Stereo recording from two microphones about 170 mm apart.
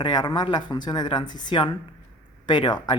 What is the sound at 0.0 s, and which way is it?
Speech, 25° left (ahead or behind).